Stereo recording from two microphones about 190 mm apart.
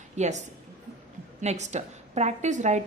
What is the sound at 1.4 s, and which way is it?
A woman's voice, 35° right (ahead or behind).